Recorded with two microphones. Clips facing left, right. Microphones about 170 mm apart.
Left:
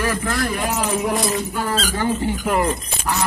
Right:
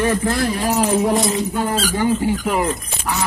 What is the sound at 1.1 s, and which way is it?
Speech, 25° right (ahead or behind).